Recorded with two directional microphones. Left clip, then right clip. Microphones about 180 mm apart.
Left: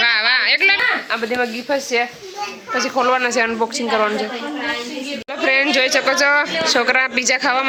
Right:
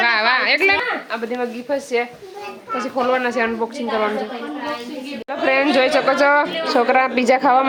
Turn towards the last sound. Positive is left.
turn(degrees=-15)  # may be behind; listen again after turning